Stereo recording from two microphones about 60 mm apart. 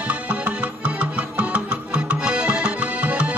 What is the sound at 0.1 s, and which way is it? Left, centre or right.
Music, right.